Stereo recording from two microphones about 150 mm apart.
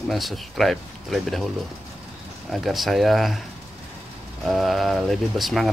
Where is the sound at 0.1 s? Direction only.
Centre (ahead or behind).